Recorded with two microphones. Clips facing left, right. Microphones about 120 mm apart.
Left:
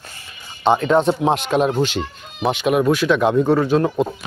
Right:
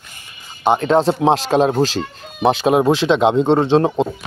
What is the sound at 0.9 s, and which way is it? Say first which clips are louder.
Speech: right 2 dB; 35° right (ahead or behind).